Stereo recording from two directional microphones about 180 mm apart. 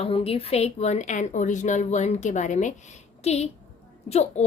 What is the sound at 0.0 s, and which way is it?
A woman's voice, 30° left (ahead or behind).